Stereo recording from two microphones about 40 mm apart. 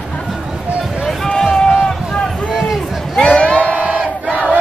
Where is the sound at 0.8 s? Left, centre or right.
Centre.